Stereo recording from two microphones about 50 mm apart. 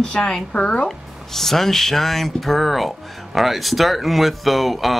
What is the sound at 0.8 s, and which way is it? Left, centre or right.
Speech, centre.